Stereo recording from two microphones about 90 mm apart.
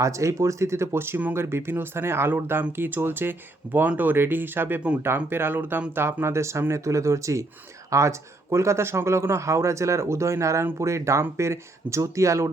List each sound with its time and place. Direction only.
0.0 s speech: 35° right (ahead or behind)